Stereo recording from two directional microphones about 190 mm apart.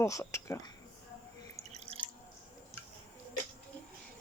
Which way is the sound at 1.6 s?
35° right (ahead or behind).